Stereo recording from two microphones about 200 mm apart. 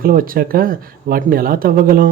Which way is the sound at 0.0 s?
45° right (ahead or behind).